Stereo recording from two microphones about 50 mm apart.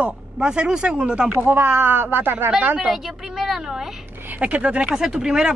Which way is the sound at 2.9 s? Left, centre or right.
Centre.